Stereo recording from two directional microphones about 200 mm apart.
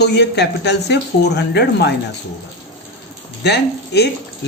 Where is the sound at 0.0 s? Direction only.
55° left (ahead or behind).